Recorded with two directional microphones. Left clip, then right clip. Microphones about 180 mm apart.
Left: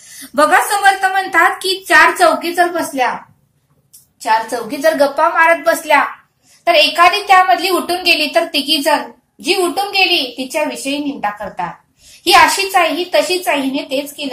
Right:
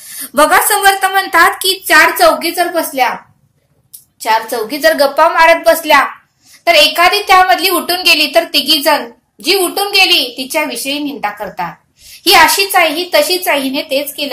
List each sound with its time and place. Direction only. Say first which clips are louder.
0.2 s a woman's voice: right 2 dB; 30° right (ahead or behind)
4.2 s a woman's voice: right 2 dB; 25° right (ahead or behind)